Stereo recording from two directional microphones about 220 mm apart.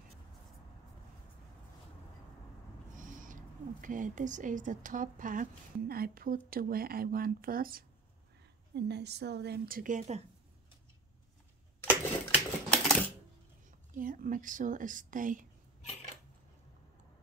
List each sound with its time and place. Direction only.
2.9 s a woman's voice: 35° right (ahead or behind)
12.3 s typewriter: 5° left (ahead or behind)
13.7 s speech: 40° right (ahead or behind)